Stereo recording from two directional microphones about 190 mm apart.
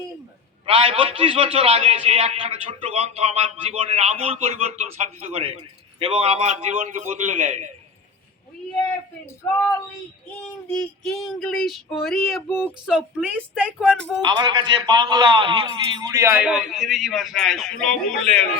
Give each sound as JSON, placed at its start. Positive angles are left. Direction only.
{"t": 0.6, "sound": "a man's voice", "side_deg": -30}
{"t": 10.7, "sound": "a man's voice", "side_deg": 5}
{"t": 14.3, "sound": "a man's voice", "side_deg": -25}